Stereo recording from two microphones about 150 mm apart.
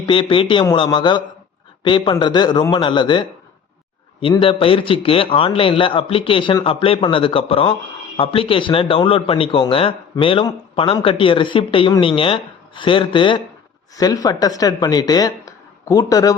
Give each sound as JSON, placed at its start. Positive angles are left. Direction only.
{"t": 0.0, "sound": "a man's voice", "side_deg": 35}